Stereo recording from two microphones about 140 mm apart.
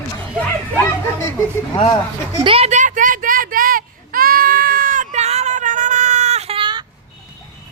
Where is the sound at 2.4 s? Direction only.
40° right (ahead or behind).